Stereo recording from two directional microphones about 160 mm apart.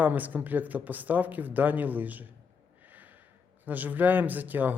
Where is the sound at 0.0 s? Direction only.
10° right (ahead or behind).